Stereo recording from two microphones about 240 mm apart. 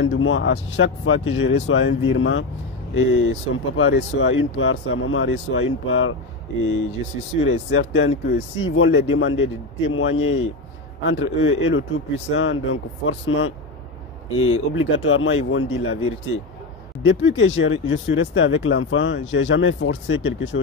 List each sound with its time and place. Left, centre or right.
0.0 s speech: left
14.3 s speech: left